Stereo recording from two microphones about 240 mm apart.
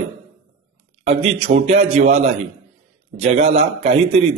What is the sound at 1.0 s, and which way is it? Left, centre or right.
A man's voice, right.